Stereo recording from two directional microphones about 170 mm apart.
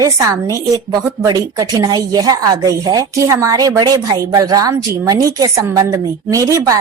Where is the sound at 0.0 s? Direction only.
20° right (ahead or behind).